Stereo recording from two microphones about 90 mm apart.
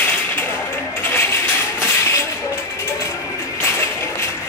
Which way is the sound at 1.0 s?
25° left (ahead or behind).